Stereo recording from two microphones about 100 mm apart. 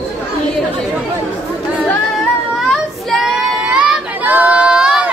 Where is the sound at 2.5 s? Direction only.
Centre (ahead or behind).